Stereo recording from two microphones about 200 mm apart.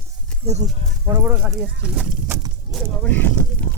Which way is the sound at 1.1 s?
10° right (ahead or behind).